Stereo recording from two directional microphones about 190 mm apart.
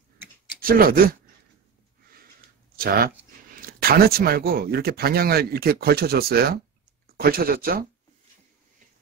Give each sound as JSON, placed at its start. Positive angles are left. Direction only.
{"t": 0.6, "sound": "speech", "side_deg": -50}
{"t": 2.7, "sound": "speech", "side_deg": -50}